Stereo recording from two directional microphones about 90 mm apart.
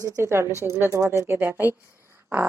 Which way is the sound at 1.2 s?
25° right (ahead or behind).